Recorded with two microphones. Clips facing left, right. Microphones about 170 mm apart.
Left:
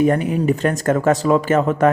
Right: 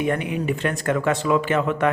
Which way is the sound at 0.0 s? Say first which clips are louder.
Left 7 dB; 40° left (ahead or behind).